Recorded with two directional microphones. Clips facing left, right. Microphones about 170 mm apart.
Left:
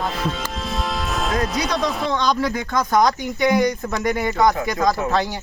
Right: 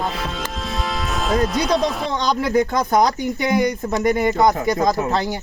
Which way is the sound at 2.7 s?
25° right (ahead or behind).